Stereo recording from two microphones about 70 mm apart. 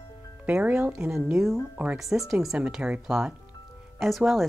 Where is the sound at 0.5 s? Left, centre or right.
Centre.